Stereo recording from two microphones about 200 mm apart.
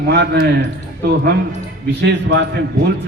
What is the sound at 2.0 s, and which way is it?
Speech, 55° right (ahead or behind).